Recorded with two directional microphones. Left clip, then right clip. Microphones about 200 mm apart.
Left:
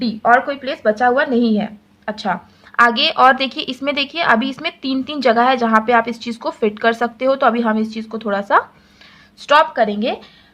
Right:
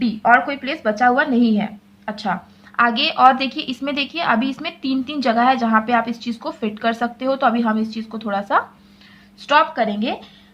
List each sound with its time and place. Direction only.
0.2 s a woman's voice: 25° left (ahead or behind)